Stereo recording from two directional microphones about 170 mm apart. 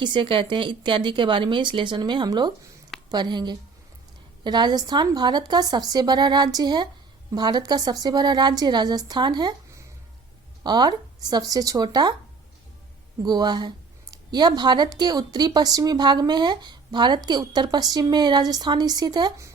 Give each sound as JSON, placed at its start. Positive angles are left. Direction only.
{"t": 0.0, "sound": "speech", "side_deg": -30}
{"t": 13.2, "sound": "speech", "side_deg": -25}